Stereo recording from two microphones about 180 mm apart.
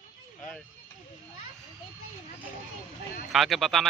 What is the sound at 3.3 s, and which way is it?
Speech, centre (ahead or behind).